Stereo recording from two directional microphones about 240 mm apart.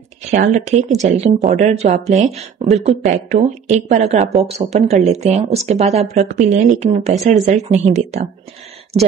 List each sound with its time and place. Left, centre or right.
0.2 s speech: right